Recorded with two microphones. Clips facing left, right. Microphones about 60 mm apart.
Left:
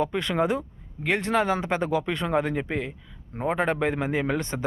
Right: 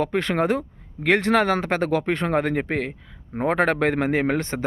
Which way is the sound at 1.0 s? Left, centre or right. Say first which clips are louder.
Right 5 dB; right.